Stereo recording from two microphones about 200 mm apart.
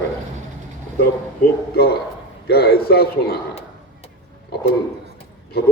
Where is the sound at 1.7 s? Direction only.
50° left (ahead or behind).